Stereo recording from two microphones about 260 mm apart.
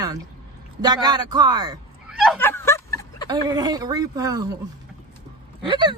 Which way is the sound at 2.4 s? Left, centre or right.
Centre.